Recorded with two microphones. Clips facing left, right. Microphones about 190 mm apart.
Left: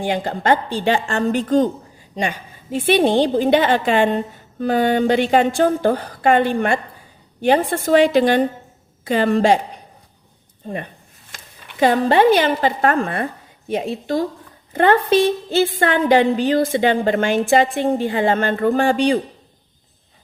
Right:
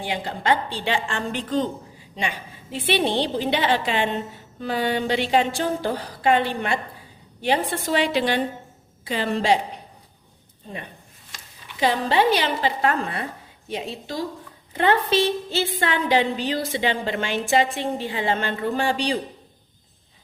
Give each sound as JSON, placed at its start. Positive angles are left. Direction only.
{"t": 0.0, "sound": "a woman's voice", "side_deg": 45}
{"t": 2.7, "sound": "a woman's voice", "side_deg": 45}
{"t": 10.6, "sound": "a woman's voice", "side_deg": 50}